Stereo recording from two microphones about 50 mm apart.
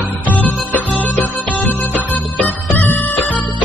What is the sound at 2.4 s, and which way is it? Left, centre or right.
Music, left.